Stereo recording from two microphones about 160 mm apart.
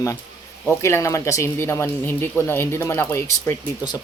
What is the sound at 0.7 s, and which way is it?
Speech, 15° left (ahead or behind).